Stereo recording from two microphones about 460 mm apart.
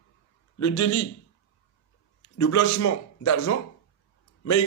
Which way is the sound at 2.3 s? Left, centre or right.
Left.